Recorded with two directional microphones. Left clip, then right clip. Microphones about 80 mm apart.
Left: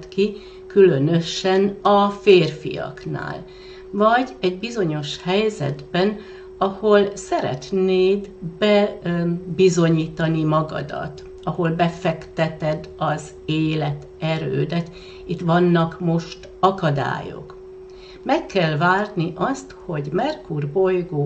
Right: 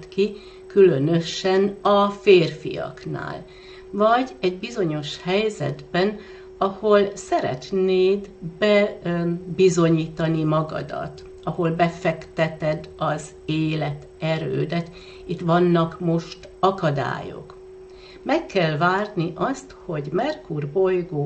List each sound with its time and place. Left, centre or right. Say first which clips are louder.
0.2 s speech: left 1 dB; centre